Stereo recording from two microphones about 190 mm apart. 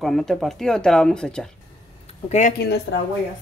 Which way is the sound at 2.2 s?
35° left (ahead or behind).